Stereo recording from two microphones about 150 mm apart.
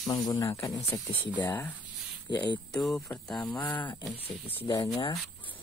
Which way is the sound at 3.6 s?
20° left (ahead or behind).